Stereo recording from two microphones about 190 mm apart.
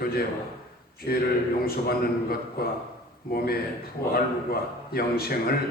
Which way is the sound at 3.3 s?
50° left (ahead or behind).